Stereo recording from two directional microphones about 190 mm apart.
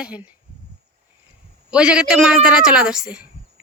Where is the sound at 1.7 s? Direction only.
5° right (ahead or behind).